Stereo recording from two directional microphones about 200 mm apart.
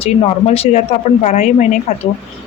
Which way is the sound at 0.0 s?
30° left (ahead or behind).